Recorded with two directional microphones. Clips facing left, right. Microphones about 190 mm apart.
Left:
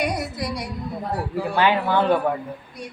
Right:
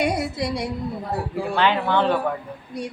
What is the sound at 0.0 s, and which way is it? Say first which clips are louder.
Female singing: right 3 dB; 25° right (ahead or behind).